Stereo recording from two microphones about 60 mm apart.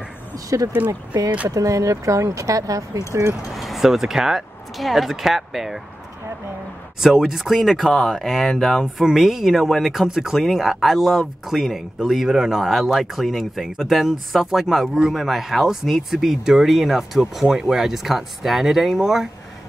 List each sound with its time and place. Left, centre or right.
0.5 s speech: right
3.1 s speech: right
3.5 s speech: centre
7.0 s speech: centre